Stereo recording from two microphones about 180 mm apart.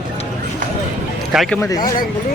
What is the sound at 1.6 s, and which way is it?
Speech, 20° left (ahead or behind).